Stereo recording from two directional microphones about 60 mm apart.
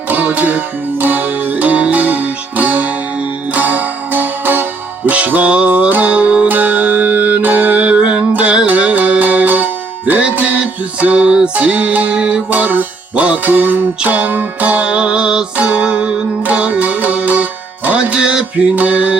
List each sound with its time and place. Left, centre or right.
0.1 s music: right
11.5 s music: right
12.5 s music: right